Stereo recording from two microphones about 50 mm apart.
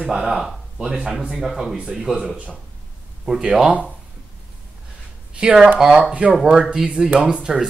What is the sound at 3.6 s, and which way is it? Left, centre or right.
Speech, right.